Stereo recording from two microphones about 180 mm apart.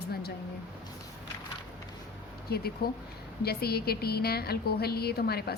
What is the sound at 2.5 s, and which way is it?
A woman's voice, 60° left (ahead or behind).